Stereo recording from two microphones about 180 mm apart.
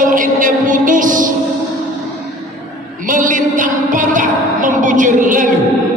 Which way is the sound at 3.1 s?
50° right (ahead or behind).